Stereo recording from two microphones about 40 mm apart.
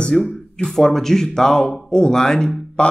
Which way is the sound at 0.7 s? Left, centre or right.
Centre.